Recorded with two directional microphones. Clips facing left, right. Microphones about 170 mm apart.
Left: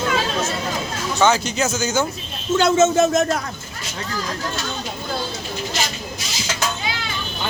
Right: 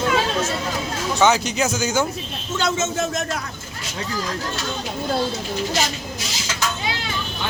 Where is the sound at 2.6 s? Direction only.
55° left (ahead or behind).